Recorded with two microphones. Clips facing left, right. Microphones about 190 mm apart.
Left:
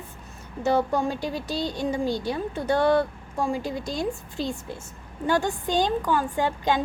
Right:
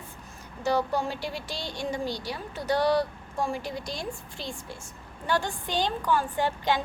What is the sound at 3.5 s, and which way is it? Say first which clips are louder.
Speech: left 5 dB; 20° left (ahead or behind).